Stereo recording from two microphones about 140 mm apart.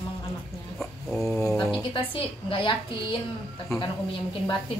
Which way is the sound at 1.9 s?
40° left (ahead or behind).